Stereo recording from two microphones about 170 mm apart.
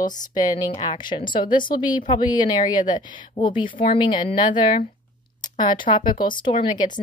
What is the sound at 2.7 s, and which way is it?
Speech, 50° left (ahead or behind).